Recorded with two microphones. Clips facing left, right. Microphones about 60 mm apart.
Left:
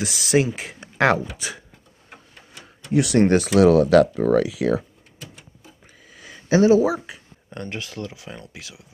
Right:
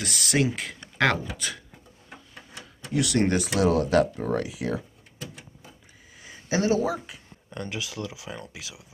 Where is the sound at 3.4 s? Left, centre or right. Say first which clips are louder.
Left 8 dB; left.